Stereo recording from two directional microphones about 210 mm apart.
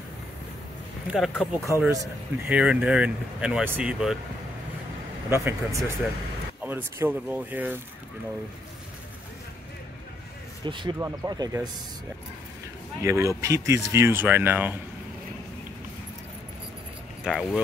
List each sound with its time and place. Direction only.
1.0 s speech: centre (ahead or behind)
1.6 s speech: 15° right (ahead or behind)
5.3 s speech: 10° right (ahead or behind)
10.6 s speech: 20° right (ahead or behind)
13.0 s speech: 15° right (ahead or behind)
17.2 s speech: centre (ahead or behind)